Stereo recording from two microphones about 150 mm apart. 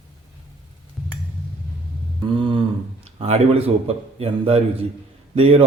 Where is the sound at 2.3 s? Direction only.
35° right (ahead or behind).